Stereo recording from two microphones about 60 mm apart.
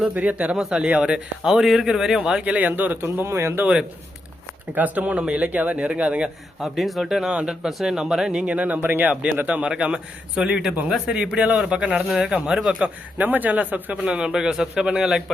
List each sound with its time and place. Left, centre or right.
0.1 s speech: right; by 2.4 s centre
2.4 s speech: right
3.2 s speech: right
4.7 s speech: right
6.6 s speech: centre
8.4 s speech: right
13.1 s speech: right
14.3 s speech: centre